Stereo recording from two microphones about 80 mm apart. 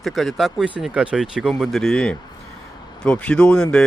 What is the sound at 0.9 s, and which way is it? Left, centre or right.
Speech, centre.